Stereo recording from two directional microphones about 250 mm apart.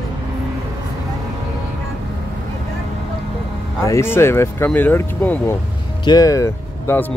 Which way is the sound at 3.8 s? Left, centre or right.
Centre.